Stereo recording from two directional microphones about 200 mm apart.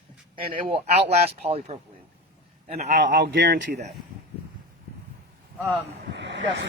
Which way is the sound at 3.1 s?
55° right (ahead or behind).